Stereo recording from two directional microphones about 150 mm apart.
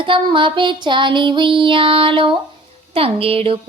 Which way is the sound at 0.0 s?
35° right (ahead or behind).